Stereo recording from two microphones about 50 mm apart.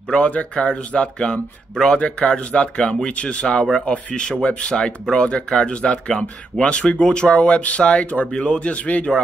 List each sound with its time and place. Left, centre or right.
0.1 s speech: left
4.7 s speech: centre; by 9.0 s left